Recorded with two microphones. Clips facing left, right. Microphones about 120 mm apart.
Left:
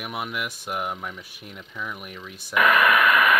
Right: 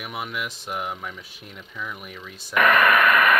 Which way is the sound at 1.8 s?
5° left (ahead or behind).